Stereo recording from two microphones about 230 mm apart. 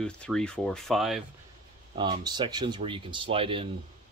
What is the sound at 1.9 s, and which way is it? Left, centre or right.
Speech, centre.